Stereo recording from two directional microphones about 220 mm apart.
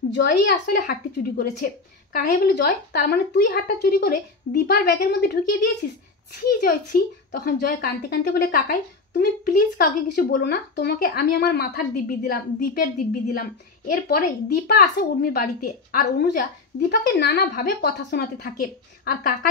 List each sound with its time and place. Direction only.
0.1 s a woman's voice: 50° left (ahead or behind)
14.0 s a woman's voice: 45° left (ahead or behind)